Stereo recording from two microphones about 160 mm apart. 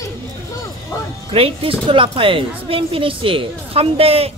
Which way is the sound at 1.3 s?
35° right (ahead or behind).